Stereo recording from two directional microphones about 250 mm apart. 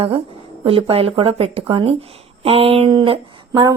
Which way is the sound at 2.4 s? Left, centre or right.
Right.